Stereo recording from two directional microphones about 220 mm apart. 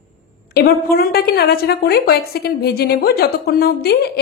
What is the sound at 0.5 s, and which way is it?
A woman's voice, 45° left (ahead or behind).